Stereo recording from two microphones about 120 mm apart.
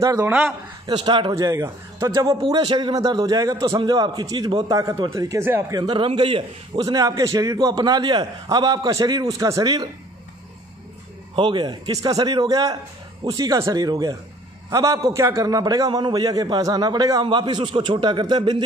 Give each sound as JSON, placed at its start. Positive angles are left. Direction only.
{"t": 0.0, "sound": "speech", "side_deg": -25}
{"t": 0.9, "sound": "a man's voice", "side_deg": -45}
{"t": 1.3, "sound": "a man's voice", "side_deg": -25}
{"t": 5.7, "sound": "a man's voice", "side_deg": -35}
{"t": 6.8, "sound": "a man's voice", "side_deg": -30}
{"t": 11.3, "sound": "a man's voice", "side_deg": -40}